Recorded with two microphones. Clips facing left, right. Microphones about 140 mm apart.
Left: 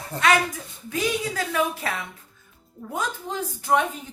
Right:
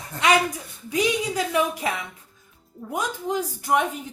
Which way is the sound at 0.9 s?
15° right (ahead or behind).